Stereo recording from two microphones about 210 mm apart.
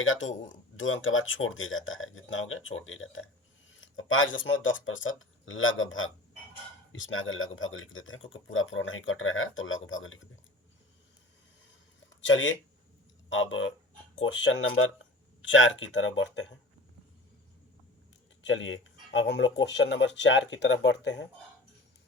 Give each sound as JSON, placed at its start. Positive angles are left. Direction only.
{"t": 0.0, "sound": "speech", "side_deg": 70}
{"t": 12.2, "sound": "speech", "side_deg": 65}
{"t": 18.4, "sound": "speech", "side_deg": 60}